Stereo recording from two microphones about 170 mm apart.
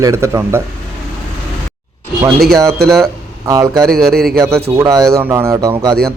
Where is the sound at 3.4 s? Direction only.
20° right (ahead or behind).